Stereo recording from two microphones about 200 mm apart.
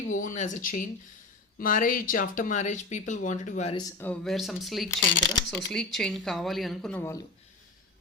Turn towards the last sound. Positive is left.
turn(degrees=10)  # may be behind; listen again after turning